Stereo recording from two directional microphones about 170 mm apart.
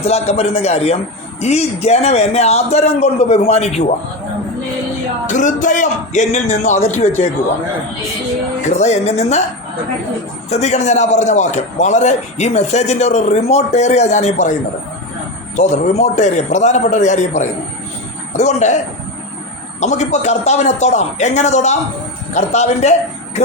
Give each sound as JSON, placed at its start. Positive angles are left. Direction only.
{"t": 0.0, "sound": "a man's voice", "side_deg": 35}
{"t": 5.3, "sound": "a man's voice", "side_deg": 45}
{"t": 8.8, "sound": "a man's voice", "side_deg": 40}
{"t": 10.5, "sound": "a man's voice", "side_deg": 40}
{"t": 15.5, "sound": "a man's voice", "side_deg": 45}
{"t": 19.8, "sound": "a man's voice", "side_deg": 45}